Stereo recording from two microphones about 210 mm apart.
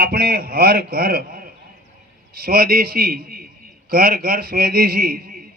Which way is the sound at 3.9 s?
45° right (ahead or behind).